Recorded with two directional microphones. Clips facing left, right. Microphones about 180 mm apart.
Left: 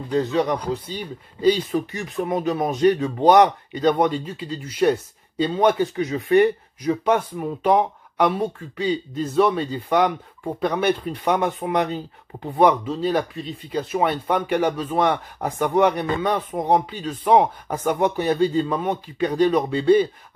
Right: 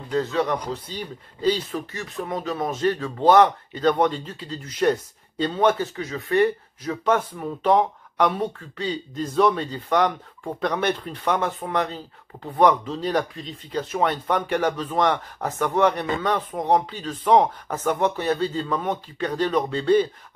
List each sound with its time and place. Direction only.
0.1 s speech: 15° left (ahead or behind)